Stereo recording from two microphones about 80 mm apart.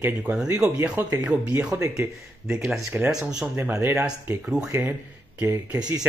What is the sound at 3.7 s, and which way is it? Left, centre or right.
Speech, right.